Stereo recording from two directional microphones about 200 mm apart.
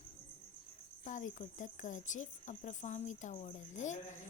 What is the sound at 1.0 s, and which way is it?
Speech, 40° left (ahead or behind).